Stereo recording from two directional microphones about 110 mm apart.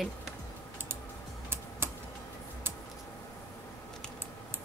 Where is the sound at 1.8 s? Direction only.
20° right (ahead or behind).